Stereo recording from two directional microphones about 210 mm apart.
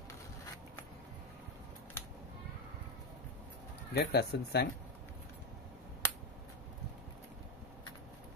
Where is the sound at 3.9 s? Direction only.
50° left (ahead or behind).